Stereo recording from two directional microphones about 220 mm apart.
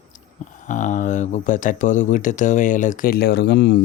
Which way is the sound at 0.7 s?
35° left (ahead or behind).